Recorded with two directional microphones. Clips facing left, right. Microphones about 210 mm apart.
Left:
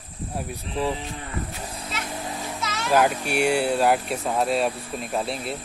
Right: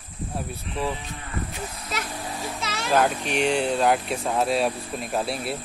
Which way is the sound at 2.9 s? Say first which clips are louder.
Left 1 dB; 10° left (ahead or behind).